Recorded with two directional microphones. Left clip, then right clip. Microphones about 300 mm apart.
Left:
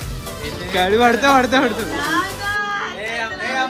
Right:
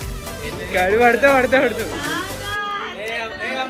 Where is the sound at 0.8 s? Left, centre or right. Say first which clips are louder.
Even; centre.